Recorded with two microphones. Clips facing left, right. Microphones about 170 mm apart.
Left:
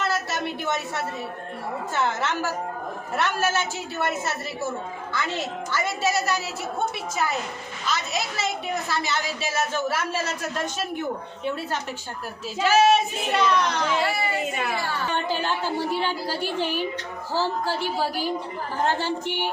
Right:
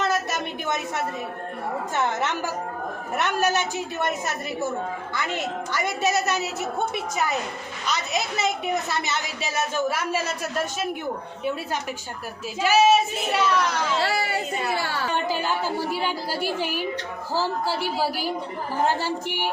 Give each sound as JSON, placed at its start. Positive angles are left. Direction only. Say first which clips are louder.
{"t": 0.0, "sound": "a sound", "louder": "right 1 dB", "side_deg": -20}
{"t": 2.0, "sound": "a woman's voice", "louder": "even", "side_deg": -20}
{"t": 7.9, "sound": "a woman's voice", "louder": "right 1 dB", "side_deg": -20}
{"t": 12.5, "sound": "a woman's voice", "louder": "even", "side_deg": -10}
{"t": 14.0, "sound": "speech", "louder": "even", "side_deg": -75}
{"t": 15.3, "sound": "a woman's voice", "louder": "right 1 dB", "side_deg": -5}